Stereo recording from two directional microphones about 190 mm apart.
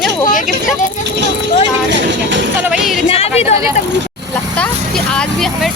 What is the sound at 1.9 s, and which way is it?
Speech, 70° right (ahead or behind).